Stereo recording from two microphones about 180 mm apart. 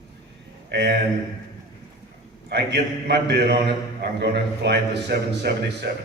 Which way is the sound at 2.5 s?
70° right (ahead or behind).